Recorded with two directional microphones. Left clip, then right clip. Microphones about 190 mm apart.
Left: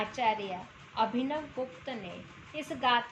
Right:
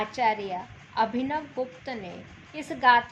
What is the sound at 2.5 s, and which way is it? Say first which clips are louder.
Speech: right 8 dB; 25° right (ahead or behind).